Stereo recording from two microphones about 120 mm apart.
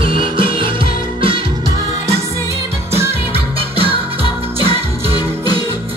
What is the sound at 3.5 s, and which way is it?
Music, 50° right (ahead or behind).